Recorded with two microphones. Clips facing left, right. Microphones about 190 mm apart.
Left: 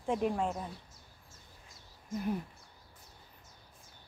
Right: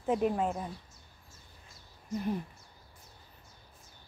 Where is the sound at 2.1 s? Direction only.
5° left (ahead or behind).